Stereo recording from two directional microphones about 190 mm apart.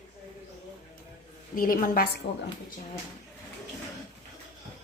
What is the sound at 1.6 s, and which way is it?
Speech, 45° left (ahead or behind).